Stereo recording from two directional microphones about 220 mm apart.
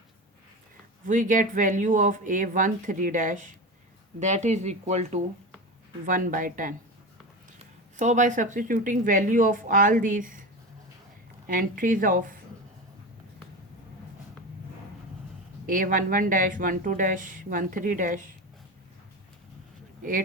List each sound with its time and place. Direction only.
1.0 s speech: 35° right (ahead or behind)
7.9 s speech: 35° right (ahead or behind)
11.4 s speech: 40° right (ahead or behind)
15.6 s speech: 40° right (ahead or behind)